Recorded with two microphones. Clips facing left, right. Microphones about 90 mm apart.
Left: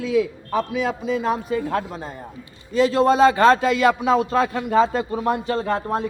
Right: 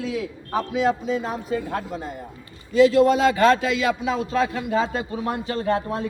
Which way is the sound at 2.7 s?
35° left (ahead or behind).